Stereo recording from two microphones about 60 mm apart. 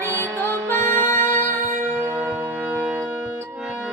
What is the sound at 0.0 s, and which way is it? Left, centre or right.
Music, left.